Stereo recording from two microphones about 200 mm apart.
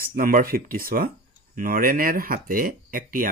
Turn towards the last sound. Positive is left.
turn(degrees=-45)  # may be behind; listen again after turning